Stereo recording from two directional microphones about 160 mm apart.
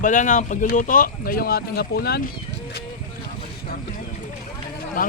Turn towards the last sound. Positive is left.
turn(degrees=60)  # may be behind; listen again after turning